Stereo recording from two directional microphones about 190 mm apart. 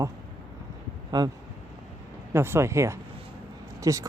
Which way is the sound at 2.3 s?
15° right (ahead or behind).